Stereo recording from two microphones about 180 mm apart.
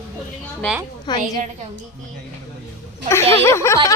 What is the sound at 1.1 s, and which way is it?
Speech, 25° left (ahead or behind).